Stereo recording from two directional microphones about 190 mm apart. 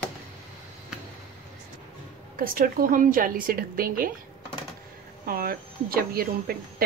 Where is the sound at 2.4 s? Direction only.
45° right (ahead or behind).